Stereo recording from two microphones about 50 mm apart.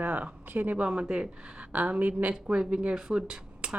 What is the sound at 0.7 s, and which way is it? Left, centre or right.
A woman's voice, right.